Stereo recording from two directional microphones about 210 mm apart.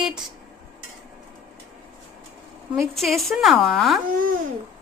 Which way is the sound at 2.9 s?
Centre (ahead or behind).